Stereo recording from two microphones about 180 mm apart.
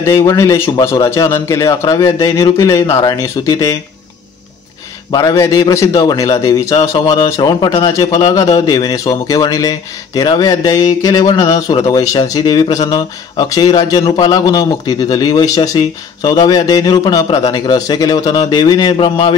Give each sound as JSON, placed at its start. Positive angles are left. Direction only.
{"t": 0.0, "sound": "a man's voice", "side_deg": 15}
{"t": 5.1, "sound": "a man's voice", "side_deg": 15}